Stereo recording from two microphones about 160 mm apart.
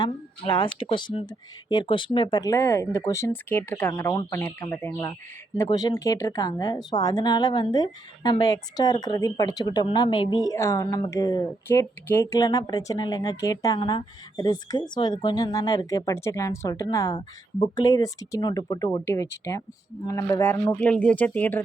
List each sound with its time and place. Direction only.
0.0 s speech: 35° left (ahead or behind); by 5.1 s 15° left (ahead or behind)
5.6 s a woman's voice: 25° left (ahead or behind); by 21.6 s 10° left (ahead or behind)